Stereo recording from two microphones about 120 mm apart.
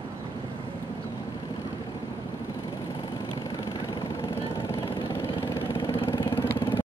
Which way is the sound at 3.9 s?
45° left (ahead or behind).